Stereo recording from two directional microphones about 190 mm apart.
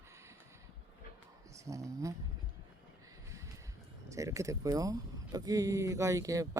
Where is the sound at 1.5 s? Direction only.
15° right (ahead or behind).